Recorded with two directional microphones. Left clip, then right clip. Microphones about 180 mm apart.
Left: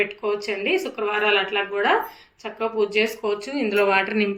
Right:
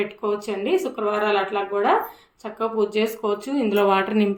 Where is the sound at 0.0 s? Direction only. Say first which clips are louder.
Left 1 dB; 45° right (ahead or behind).